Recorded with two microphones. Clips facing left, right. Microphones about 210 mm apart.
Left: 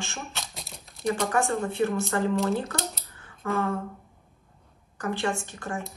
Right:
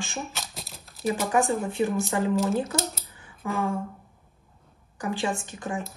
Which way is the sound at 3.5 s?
15° right (ahead or behind).